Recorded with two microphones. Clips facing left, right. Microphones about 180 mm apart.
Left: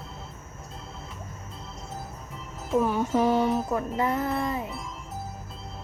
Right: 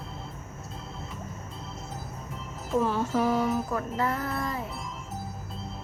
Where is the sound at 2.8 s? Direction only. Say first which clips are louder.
Left 2 dB; 15° left (ahead or behind).